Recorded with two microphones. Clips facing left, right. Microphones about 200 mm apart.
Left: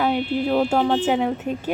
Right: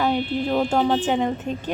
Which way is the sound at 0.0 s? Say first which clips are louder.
Even; 10° left (ahead or behind).